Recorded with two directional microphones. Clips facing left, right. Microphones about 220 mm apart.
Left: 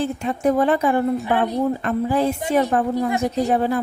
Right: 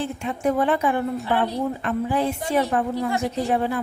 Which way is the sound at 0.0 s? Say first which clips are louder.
Left 4 dB; 40° left (ahead or behind).